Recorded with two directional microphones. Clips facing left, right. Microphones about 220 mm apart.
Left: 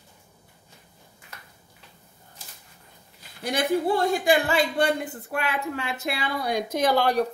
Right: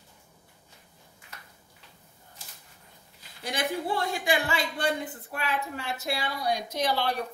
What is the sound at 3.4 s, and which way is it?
Speech, 50° left (ahead or behind).